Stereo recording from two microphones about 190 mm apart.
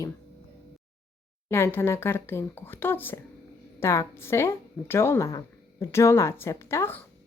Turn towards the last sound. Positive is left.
turn(degrees=15)  # may be behind; listen again after turning